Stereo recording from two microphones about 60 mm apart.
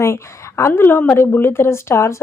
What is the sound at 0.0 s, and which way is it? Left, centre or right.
Speech, left.